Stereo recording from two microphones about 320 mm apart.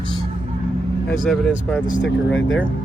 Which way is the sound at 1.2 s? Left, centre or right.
Centre.